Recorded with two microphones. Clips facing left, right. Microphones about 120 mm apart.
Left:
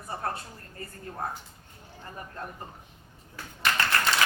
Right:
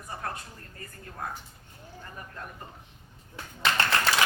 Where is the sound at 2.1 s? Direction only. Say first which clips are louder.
Left 4 dB; 30° left (ahead or behind).